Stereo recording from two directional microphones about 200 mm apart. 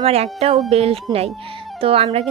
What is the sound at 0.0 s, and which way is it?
Speech, 30° right (ahead or behind).